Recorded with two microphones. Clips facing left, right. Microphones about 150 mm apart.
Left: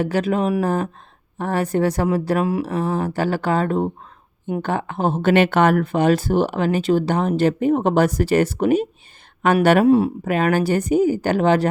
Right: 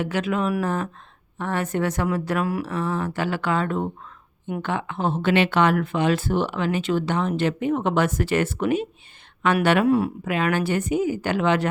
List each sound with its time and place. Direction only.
0.0 s speech: 40° left (ahead or behind)
9.8 s speech: 25° left (ahead or behind)
10.2 s speech: 45° left (ahead or behind)